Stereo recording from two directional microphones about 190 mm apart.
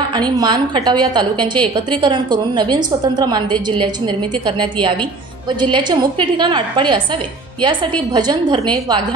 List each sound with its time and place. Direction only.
0.1 s a woman's voice: 20° right (ahead or behind)